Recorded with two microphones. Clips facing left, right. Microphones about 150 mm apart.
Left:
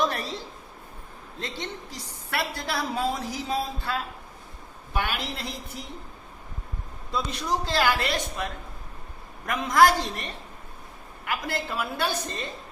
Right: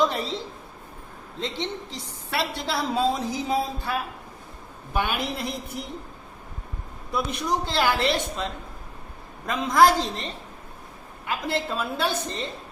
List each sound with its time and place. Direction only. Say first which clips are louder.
0.1 s a woman's voice: right 3 dB; 20° right (ahead or behind)
1.4 s a woman's voice: right 5 dB; 20° right (ahead or behind)
7.1 s a woman's voice: right 2 dB; 20° right (ahead or behind)